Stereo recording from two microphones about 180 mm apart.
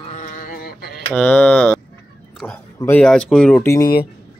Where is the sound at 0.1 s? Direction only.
40° left (ahead or behind); by 0.9 s 55° left (ahead or behind).